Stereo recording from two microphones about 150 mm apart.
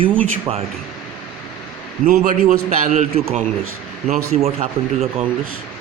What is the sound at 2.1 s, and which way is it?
A man's voice, 60° right (ahead or behind).